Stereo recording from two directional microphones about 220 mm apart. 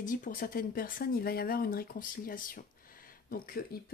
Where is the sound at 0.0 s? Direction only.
40° left (ahead or behind).